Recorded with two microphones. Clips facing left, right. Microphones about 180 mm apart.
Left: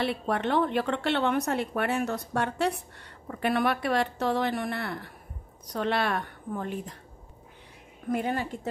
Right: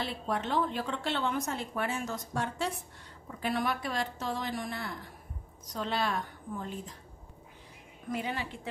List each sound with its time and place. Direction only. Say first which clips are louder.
0.0 s a woman's voice: left 6 dB; 65° left (ahead or behind)
8.1 s a woman's voice: left 6 dB; 50° left (ahead or behind)